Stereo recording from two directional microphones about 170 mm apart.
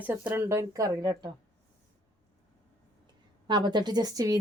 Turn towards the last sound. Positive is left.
turn(degrees=-20)  # may be behind; listen again after turning